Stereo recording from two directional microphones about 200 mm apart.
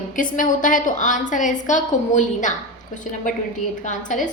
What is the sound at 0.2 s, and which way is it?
A woman's voice, 40° left (ahead or behind).